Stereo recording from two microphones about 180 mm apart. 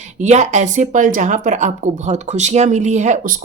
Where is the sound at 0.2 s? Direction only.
40° right (ahead or behind).